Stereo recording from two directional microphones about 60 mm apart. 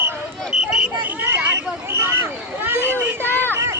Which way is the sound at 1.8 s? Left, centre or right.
Right.